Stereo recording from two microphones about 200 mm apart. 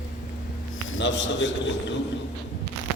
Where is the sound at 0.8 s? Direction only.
75° left (ahead or behind).